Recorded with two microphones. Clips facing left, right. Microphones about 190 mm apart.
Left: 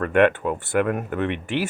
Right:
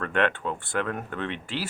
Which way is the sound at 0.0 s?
10° left (ahead or behind).